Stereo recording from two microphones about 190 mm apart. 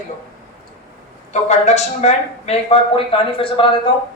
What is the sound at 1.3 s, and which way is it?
A man's voice, 35° left (ahead or behind).